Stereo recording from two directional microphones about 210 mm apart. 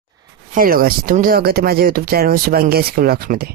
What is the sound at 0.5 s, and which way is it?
Speech, 45° right (ahead or behind).